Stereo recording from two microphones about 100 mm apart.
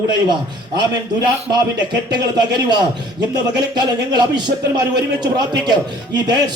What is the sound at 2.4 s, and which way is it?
A man's voice, 45° right (ahead or behind).